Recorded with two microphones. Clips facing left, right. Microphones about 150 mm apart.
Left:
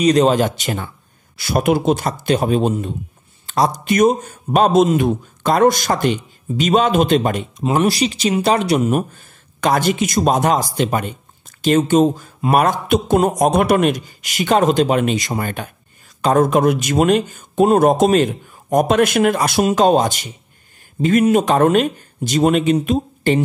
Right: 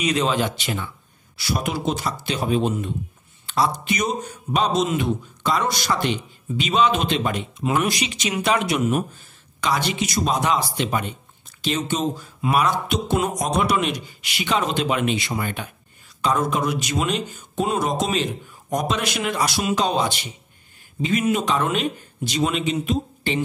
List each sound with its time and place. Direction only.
0.0 s speech: 40° left (ahead or behind)
7.6 s speech: 35° left (ahead or behind)
9.6 s speech: 50° left (ahead or behind)